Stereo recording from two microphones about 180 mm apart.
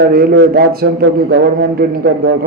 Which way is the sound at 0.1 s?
55° right (ahead or behind).